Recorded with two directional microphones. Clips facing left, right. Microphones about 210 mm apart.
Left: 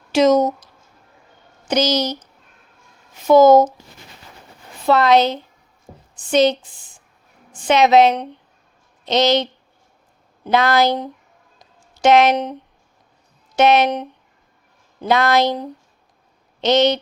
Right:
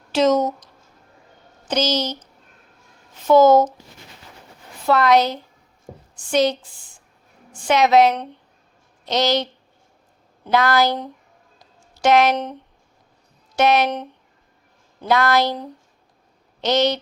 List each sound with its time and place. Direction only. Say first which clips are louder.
0.1 s a woman's voice: left 3 dB; 10° left (ahead or behind)
4.9 s speech: left 2 dB; 25° left (ahead or behind)
11.6 s a sound: left 3 dB; 20° left (ahead or behind)
13.6 s speech: left 3 dB; 20° left (ahead or behind)